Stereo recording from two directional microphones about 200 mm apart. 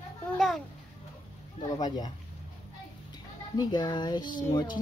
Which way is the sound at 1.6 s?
20° left (ahead or behind).